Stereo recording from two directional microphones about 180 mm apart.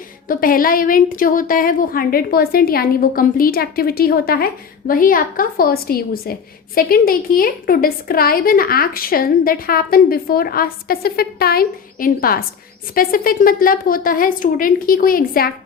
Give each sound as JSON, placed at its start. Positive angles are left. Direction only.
{"t": 0.3, "sound": "a woman's voice", "side_deg": 50}